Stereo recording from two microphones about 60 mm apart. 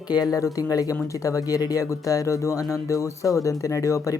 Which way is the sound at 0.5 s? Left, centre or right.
Left.